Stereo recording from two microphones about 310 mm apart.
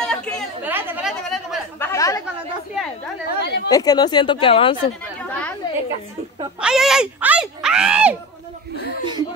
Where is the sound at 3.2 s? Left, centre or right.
Left.